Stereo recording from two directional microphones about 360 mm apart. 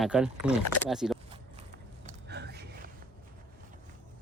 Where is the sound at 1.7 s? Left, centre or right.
Right.